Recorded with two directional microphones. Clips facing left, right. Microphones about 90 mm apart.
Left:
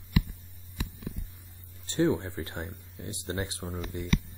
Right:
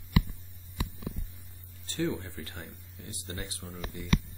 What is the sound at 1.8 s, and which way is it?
Speech, 20° left (ahead or behind).